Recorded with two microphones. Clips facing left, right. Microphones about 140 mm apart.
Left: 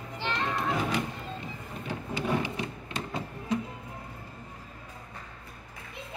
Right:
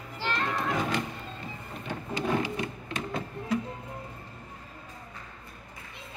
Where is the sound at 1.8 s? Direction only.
10° left (ahead or behind).